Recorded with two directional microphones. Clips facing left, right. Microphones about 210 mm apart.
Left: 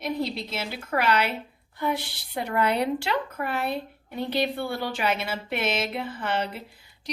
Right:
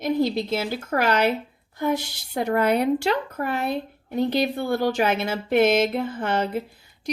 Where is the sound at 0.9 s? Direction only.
45° right (ahead or behind).